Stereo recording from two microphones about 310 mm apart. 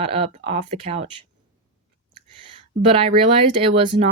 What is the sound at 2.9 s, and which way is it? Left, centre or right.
Speech, centre.